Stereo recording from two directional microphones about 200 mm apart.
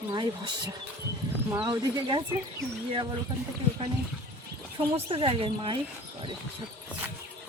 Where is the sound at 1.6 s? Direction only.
25° right (ahead or behind).